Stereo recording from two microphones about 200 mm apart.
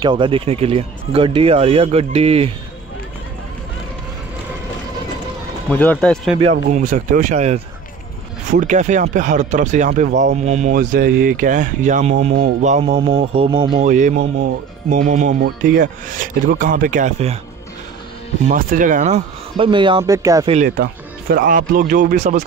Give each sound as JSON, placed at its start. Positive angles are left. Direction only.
{"t": 0.0, "sound": "speech", "side_deg": -25}
{"t": 5.7, "sound": "speech", "side_deg": 5}
{"t": 6.5, "sound": "speech", "side_deg": -40}
{"t": 18.5, "sound": "speech", "side_deg": -40}
{"t": 20.4, "sound": "speech", "side_deg": -35}
{"t": 20.7, "sound": "speech", "side_deg": -50}